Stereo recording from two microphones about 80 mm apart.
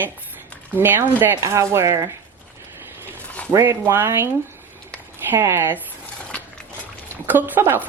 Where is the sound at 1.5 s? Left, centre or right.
Right.